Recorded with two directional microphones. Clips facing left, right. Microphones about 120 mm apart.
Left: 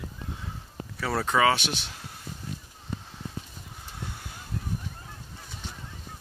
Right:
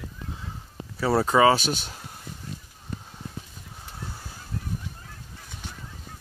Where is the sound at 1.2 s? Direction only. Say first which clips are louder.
Right 4 dB; 25° right (ahead or behind).